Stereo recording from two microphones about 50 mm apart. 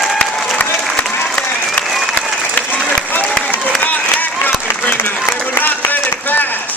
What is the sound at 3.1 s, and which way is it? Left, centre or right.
Applause, left.